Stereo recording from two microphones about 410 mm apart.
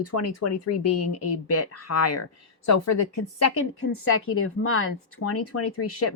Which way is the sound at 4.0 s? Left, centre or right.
Left.